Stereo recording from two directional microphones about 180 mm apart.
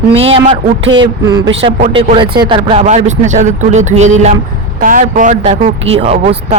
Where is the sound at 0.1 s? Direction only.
30° right (ahead or behind).